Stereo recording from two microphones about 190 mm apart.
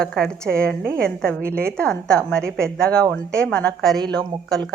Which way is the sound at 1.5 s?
55° right (ahead or behind).